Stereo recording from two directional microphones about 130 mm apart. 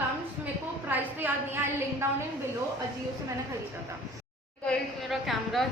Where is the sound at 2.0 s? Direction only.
20° right (ahead or behind).